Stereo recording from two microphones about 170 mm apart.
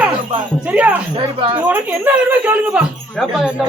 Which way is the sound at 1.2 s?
30° right (ahead or behind).